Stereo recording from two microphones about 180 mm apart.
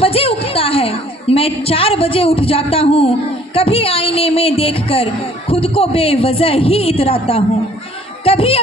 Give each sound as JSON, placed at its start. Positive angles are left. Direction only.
{"t": 0.0, "sound": "a woman's voice", "side_deg": 30}